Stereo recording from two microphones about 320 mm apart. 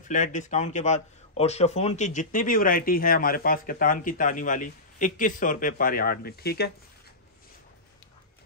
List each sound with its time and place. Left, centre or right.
0.0 s speech: left